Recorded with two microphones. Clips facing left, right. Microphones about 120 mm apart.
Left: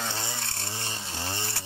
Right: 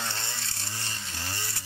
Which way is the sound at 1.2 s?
20° left (ahead or behind).